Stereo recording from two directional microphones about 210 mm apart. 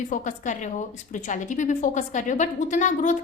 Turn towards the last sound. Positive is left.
turn(degrees=35)  # may be behind; listen again after turning